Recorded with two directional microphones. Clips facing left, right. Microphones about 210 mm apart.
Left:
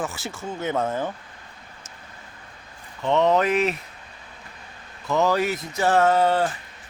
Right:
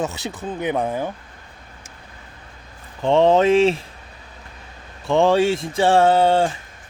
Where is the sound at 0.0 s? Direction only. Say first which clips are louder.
Right 4 dB; 20° right (ahead or behind).